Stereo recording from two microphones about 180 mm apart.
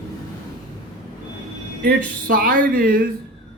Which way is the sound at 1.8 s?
55° right (ahead or behind).